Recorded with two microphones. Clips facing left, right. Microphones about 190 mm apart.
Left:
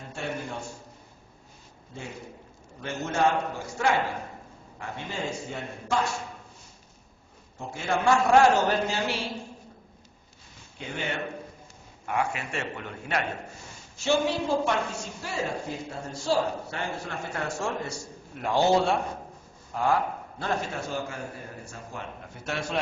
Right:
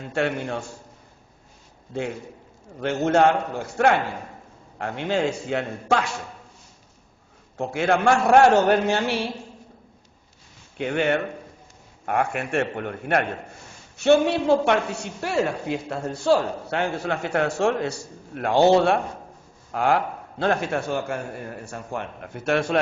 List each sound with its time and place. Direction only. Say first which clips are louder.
0.1 s a man's voice: right 9 dB; 80° right
2.8 s a man's voice: right 7 dB; 70° right (ahead or behind)
7.6 s a man's voice: right 6 dB; 75° right (ahead or behind)
10.8 s a man's voice: right 10 dB; 70° right (ahead or behind)